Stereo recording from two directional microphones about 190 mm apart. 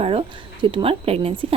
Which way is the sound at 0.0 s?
30° right (ahead or behind).